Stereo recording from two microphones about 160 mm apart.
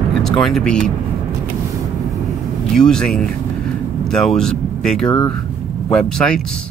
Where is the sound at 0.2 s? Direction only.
Centre (ahead or behind).